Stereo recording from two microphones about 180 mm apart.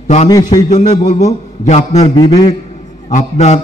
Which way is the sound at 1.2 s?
40° left (ahead or behind).